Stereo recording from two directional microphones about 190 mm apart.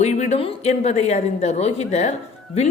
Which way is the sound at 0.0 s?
35° left (ahead or behind).